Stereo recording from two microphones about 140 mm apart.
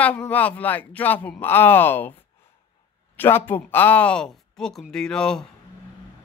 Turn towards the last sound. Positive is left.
turn(degrees=5)  # may be behind; listen again after turning